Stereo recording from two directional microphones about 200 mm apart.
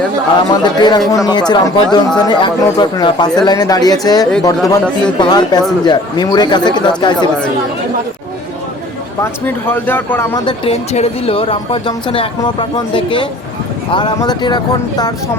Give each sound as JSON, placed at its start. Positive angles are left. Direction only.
{"t": 0.6, "sound": "a woman's voice", "side_deg": 20}
{"t": 9.2, "sound": "speech", "side_deg": 10}
{"t": 10.4, "sound": "a woman's voice", "side_deg": 30}